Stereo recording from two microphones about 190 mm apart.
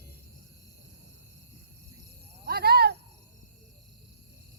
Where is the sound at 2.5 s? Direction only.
55° right (ahead or behind).